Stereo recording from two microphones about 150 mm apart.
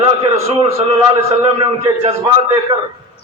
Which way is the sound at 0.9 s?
25° right (ahead or behind).